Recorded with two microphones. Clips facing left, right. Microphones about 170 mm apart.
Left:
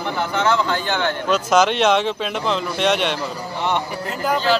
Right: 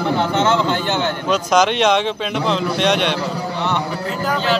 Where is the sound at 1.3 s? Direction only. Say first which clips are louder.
Right 1 dB; 5° left (ahead or behind).